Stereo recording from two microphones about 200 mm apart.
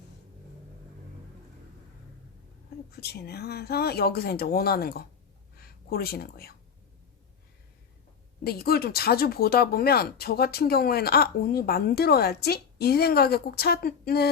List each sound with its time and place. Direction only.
3.0 s speech: 50° left (ahead or behind)
8.4 s speech: 50° left (ahead or behind)